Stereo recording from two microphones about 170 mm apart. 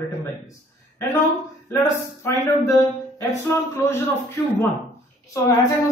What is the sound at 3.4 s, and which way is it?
A man's voice, 15° left (ahead or behind).